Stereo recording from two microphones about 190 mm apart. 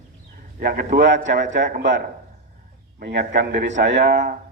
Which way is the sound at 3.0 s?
60° right (ahead or behind).